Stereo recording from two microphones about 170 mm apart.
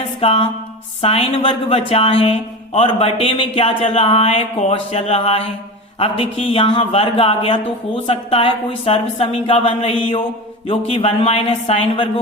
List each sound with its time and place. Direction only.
0.2 s a woman's voice: 35° left (ahead or behind)